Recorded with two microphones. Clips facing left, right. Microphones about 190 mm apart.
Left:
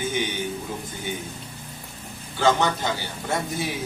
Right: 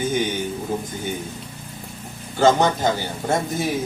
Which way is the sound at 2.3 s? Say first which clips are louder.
Right 5 dB; 45° right (ahead or behind).